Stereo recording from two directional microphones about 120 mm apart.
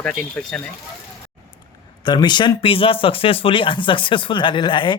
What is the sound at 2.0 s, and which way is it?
Speech, 40° left (ahead or behind).